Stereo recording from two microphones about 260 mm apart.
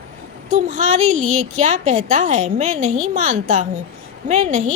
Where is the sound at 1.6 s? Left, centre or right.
Right.